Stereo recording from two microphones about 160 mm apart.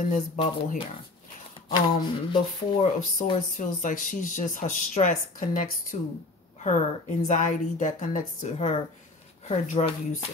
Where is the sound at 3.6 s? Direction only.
55° left (ahead or behind).